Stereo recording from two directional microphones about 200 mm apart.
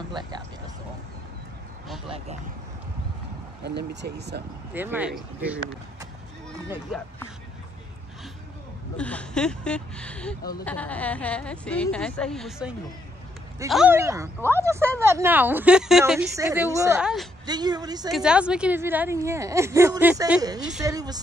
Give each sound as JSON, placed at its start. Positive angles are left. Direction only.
{"t": 0.2, "sound": "a woman's voice", "side_deg": -20}
{"t": 2.0, "sound": "a woman's voice", "side_deg": -30}
{"t": 3.6, "sound": "speech", "side_deg": -60}
{"t": 4.7, "sound": "speech", "side_deg": -10}
{"t": 8.9, "sound": "speech", "side_deg": 5}
{"t": 13.9, "sound": "speech", "side_deg": -15}
{"t": 16.3, "sound": "speech", "side_deg": -15}
{"t": 17.0, "sound": "speech", "side_deg": 0}
{"t": 17.5, "sound": "a woman's voice", "side_deg": -20}
{"t": 18.1, "sound": "speech", "side_deg": -5}
{"t": 20.8, "sound": "a woman's voice", "side_deg": -20}